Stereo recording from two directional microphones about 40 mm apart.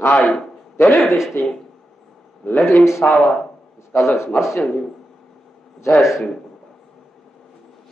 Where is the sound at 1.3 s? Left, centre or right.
Left.